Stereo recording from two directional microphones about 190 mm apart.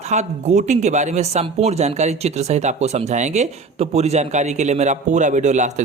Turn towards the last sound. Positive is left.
turn(degrees=-40)  # may be behind; listen again after turning